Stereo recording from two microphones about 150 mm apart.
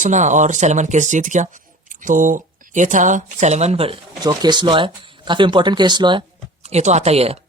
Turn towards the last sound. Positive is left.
turn(degrees=-40)  # may be behind; listen again after turning